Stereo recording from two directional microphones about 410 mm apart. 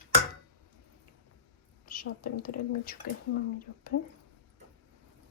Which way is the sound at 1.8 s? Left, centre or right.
Centre.